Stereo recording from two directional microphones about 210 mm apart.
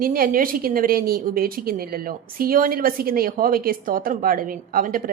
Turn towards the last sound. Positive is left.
turn(degrees=-40)  # may be behind; listen again after turning